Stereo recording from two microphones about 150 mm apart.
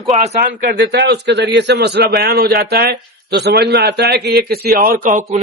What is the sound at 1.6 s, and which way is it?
A man's voice, 90° right.